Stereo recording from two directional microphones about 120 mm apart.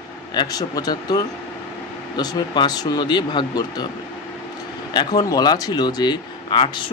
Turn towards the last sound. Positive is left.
turn(degrees=45)  # may be behind; listen again after turning